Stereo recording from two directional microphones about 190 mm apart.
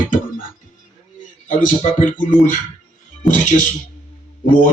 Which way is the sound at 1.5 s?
40° left (ahead or behind).